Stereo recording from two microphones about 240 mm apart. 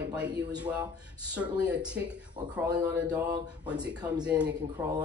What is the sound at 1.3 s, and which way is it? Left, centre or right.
Speech, centre.